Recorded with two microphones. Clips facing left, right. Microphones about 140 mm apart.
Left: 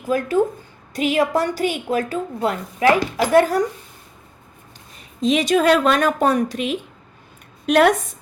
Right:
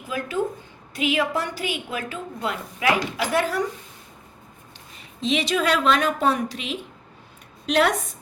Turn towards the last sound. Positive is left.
turn(degrees=50)  # may be behind; listen again after turning